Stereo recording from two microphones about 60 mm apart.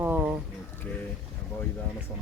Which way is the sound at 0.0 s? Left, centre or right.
Right.